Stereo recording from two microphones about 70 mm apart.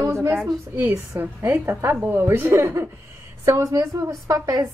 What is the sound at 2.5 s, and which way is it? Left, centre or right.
A woman's voice, right.